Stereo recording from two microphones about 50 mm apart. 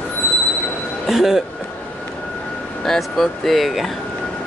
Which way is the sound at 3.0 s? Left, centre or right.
Centre.